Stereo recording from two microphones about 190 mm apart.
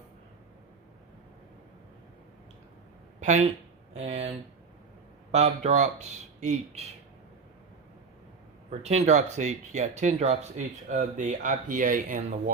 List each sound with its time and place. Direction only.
3.2 s speech: 40° right (ahead or behind)
8.8 s speech: 35° right (ahead or behind)